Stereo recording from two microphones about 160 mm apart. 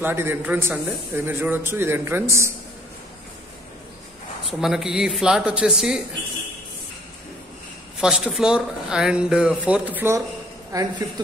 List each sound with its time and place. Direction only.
0.0 s a man's voice: 15° right (ahead or behind)
4.5 s speech: centre (ahead or behind)
8.0 s a man's voice: 5° right (ahead or behind); by 11.1 s 20° right (ahead or behind)